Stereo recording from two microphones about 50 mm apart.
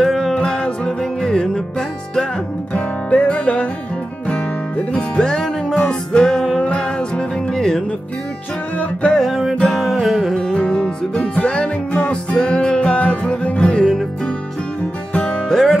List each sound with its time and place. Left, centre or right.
0.0 s music: centre
0.3 s music: centre
9.1 s music: centre
10.5 s music: centre
15.5 s music: centre